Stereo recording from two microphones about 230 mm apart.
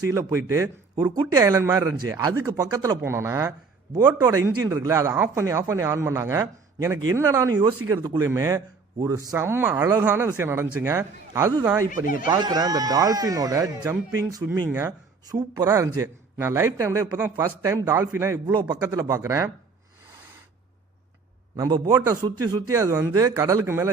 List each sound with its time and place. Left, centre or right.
0.1 s speech: centre
11.9 s speech: left
12.2 s speech: centre
21.5 s speech: centre